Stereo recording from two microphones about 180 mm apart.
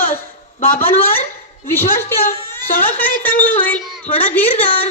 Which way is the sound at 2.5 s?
10° left (ahead or behind).